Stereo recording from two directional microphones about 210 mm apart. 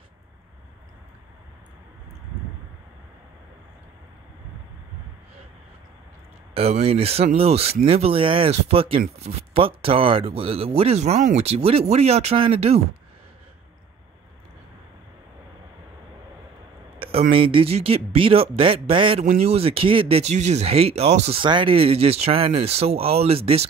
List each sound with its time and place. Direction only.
6.5 s speech: 30° right (ahead or behind)
17.3 s speech: 25° right (ahead or behind)